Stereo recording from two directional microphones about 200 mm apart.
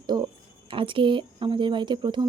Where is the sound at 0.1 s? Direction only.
20° right (ahead or behind).